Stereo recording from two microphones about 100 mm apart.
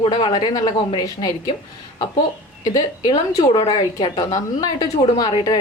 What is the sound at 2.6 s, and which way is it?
Speech, 40° left (ahead or behind).